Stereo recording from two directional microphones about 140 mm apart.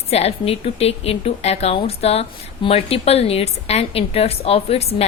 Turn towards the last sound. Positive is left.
turn(degrees=45)  # may be behind; listen again after turning